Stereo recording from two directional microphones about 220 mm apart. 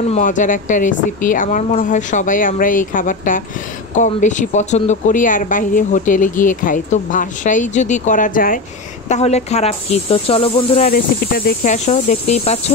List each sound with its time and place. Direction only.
0.1 s speech: 35° left (ahead or behind)
10.9 s speech: 40° left (ahead or behind)